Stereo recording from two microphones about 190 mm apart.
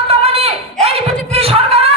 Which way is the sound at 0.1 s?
30° right (ahead or behind).